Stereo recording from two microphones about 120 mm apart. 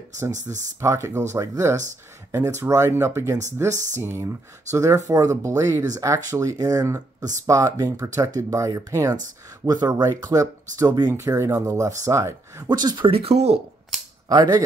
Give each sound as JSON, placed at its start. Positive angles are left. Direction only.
{"t": 0.3, "sound": "speech", "side_deg": -90}
{"t": 0.7, "sound": "speech", "side_deg": -25}
{"t": 13.1, "sound": "speech", "side_deg": -60}
{"t": 14.3, "sound": "speech", "side_deg": -35}